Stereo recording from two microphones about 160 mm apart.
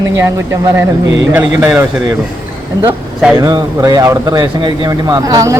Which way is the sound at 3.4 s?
20° right (ahead or behind).